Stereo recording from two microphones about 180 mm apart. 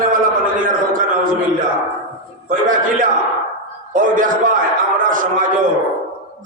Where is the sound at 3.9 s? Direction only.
50° right (ahead or behind).